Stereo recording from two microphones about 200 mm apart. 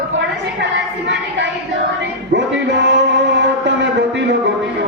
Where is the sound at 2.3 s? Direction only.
60° right (ahead or behind).